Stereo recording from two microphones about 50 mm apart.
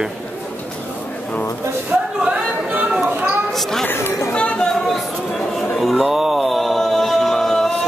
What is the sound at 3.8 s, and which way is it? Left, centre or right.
Speech, left.